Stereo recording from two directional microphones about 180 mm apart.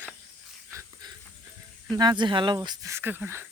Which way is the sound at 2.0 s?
25° right (ahead or behind).